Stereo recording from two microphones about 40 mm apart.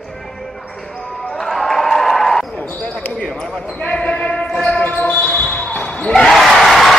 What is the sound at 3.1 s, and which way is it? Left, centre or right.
Basketball bounce, left.